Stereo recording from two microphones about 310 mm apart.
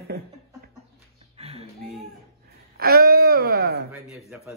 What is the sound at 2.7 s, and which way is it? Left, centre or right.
Wail, right.